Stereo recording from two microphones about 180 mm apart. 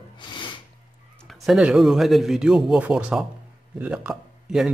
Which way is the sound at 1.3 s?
Centre (ahead or behind).